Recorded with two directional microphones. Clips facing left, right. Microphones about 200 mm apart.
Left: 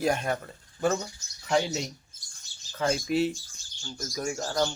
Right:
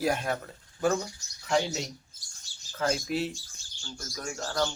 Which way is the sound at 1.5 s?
Centre (ahead or behind).